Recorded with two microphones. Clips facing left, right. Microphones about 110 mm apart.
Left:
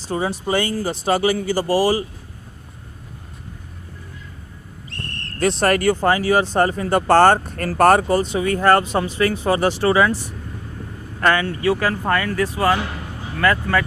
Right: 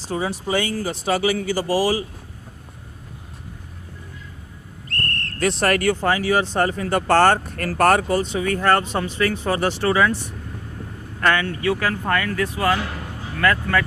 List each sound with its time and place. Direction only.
0.1 s speech: 45° left (ahead or behind)
4.9 s a sound: centre (ahead or behind)
5.4 s speech: 30° left (ahead or behind)